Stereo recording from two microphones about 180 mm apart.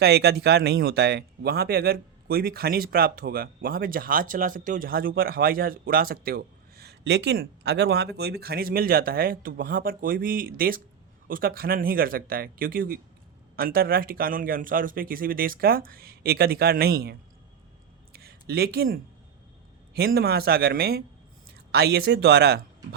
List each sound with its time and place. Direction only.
0.0 s speech: 65° right (ahead or behind)
18.1 s a sound: 60° right (ahead or behind)
19.9 s speech: 60° right (ahead or behind)